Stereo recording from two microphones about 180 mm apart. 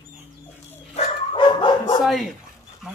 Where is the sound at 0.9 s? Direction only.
35° left (ahead or behind).